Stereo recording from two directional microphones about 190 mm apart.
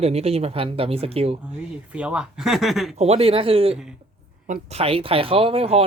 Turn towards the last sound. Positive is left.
turn(degrees=-30)  # may be behind; listen again after turning